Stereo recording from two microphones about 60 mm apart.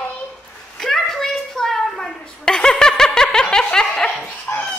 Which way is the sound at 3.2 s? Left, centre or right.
Left.